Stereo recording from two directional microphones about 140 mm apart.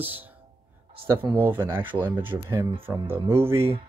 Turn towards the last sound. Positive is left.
turn(degrees=-15)  # may be behind; listen again after turning